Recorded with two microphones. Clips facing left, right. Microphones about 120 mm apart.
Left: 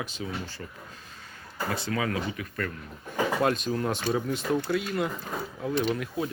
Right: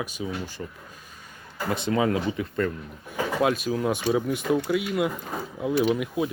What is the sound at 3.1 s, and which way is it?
Speech, 5° right (ahead or behind).